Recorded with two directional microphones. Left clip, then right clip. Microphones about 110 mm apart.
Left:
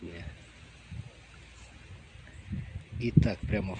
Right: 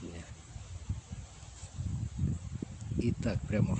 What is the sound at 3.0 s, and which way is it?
Speech, 20° right (ahead or behind).